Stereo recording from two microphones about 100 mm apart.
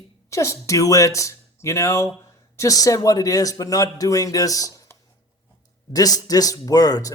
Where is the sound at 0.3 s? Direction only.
30° left (ahead or behind).